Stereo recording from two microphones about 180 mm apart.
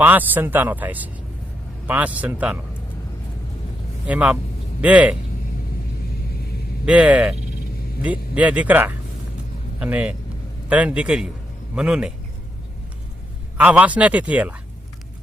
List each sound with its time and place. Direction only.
0.0 s speech: 10° right (ahead or behind)
4.0 s speech: 5° right (ahead or behind)
6.3 s vehicle: 60° left (ahead or behind)
6.8 s a man's voice: 5° right (ahead or behind)
13.6 s speech: 10° right (ahead or behind)